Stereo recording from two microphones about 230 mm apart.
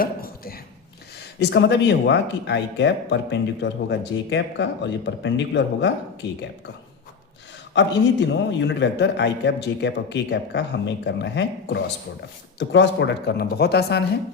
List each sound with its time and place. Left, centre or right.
0.0 s a sound: left
1.4 s speech: left
7.7 s speech: left